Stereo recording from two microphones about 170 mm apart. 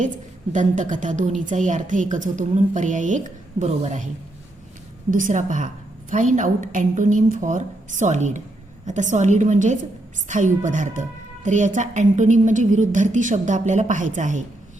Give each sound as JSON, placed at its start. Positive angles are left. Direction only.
{"t": 0.5, "sound": "a woman's voice", "side_deg": -45}
{"t": 5.1, "sound": "a woman's voice", "side_deg": -50}